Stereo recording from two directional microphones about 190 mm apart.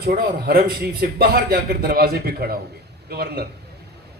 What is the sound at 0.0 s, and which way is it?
A man's voice, 55° right (ahead or behind).